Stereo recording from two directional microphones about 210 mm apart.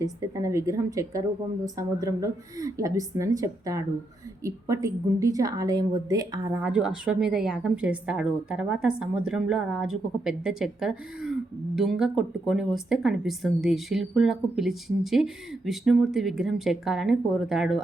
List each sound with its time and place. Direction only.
0.0 s a woman's voice: 15° right (ahead or behind)
6.6 s a woman's voice: 5° right (ahead or behind)